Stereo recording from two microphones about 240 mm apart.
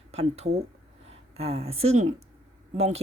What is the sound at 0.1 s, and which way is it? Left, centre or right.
Speech, right.